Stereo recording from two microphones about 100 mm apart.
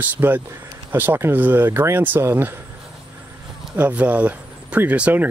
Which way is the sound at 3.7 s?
15° right (ahead or behind).